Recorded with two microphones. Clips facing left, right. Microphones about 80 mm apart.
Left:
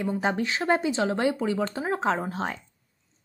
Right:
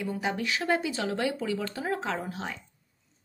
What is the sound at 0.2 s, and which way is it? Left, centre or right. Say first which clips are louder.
Speech: left 4 dB; left.